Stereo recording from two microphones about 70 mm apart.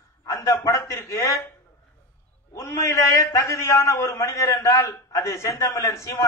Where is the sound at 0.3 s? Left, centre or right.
Left.